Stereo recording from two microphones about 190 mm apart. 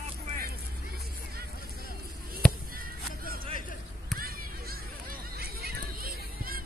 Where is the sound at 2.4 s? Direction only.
5° left (ahead or behind).